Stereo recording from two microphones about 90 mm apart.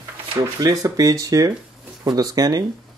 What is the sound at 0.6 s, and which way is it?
Speech, 45° right (ahead or behind).